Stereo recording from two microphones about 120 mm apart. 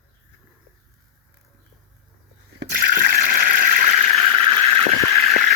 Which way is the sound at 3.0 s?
90° right.